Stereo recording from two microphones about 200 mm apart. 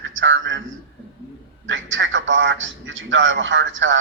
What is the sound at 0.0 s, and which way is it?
Speech, 70° right (ahead or behind).